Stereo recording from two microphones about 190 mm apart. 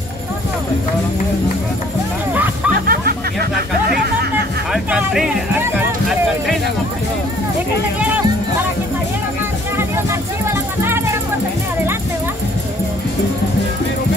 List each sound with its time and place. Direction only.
2.3 s music: 10° right (ahead or behind)
2.9 s music: 50° right (ahead or behind)
3.9 s a sound: 55° right (ahead or behind)
4.7 s music: centre (ahead or behind)
6.0 s a sound: centre (ahead or behind)
10.4 s music: 15° right (ahead or behind)